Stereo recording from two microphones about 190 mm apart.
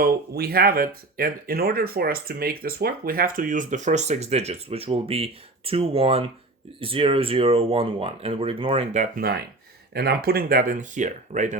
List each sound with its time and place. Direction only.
0.0 s speech: 55° right (ahead or behind)
9.9 s speech: 55° right (ahead or behind); by 11.5 s 40° right (ahead or behind)